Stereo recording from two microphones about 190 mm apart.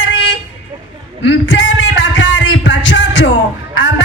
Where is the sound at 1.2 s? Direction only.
75° left (ahead or behind).